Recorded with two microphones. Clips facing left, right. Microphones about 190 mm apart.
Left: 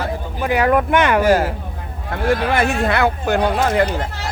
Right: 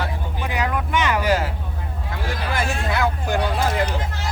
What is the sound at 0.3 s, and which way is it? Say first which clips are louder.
Speech: left 9 dB; 55° left (ahead or behind).